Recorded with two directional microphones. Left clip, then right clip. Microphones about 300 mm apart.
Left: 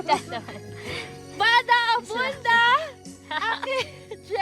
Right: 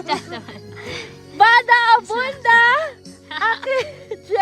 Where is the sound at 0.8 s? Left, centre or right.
Centre.